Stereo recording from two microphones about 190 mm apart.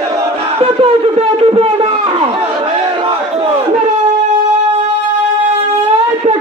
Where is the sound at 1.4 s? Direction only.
25° right (ahead or behind).